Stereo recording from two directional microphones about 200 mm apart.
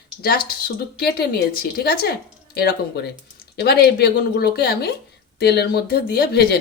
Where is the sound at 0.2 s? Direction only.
50° left (ahead or behind).